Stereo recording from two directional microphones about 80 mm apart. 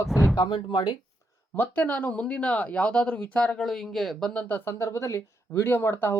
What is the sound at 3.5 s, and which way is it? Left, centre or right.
Speech, centre.